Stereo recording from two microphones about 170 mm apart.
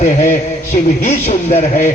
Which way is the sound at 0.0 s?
45° left (ahead or behind).